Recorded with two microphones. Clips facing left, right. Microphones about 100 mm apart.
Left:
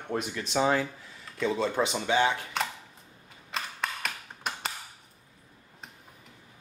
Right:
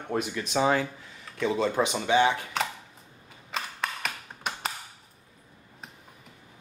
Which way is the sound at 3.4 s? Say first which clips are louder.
Right 1 dB; centre (ahead or behind).